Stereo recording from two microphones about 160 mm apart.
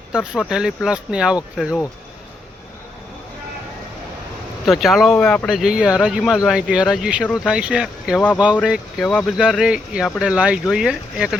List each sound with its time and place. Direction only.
0.1 s speech: 5° right (ahead or behind)
4.6 s speech: centre (ahead or behind)